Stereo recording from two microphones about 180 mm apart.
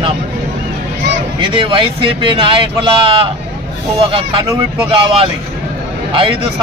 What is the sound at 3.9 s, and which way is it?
A man's voice, 30° right (ahead or behind).